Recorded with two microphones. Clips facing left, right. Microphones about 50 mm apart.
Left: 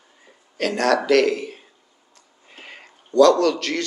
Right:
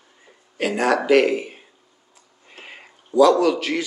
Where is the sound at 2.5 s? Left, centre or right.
Centre.